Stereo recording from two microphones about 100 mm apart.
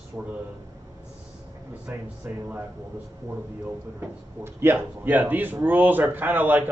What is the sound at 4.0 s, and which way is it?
Speech, 25° right (ahead or behind).